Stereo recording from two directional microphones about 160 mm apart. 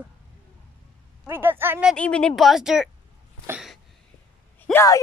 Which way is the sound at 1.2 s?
15° right (ahead or behind).